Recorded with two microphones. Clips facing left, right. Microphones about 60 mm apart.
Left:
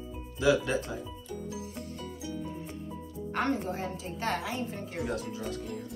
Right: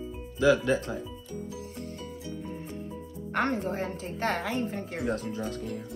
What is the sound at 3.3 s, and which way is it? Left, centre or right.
A woman's voice, right.